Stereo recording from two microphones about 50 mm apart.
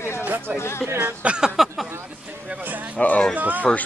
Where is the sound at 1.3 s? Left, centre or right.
Centre.